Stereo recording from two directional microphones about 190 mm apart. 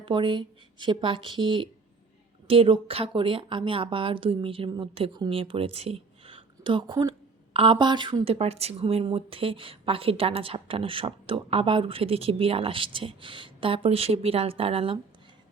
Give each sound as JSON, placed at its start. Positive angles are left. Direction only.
{"t": 0.0, "sound": "speech", "side_deg": -25}